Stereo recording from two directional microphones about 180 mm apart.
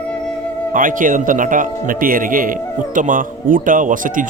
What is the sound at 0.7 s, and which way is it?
Speech, 50° right (ahead or behind).